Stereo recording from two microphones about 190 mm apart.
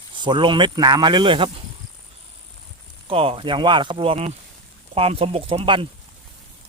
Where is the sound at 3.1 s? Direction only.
30° right (ahead or behind).